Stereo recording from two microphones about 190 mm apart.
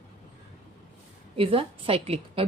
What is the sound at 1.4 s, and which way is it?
Speech, 30° right (ahead or behind).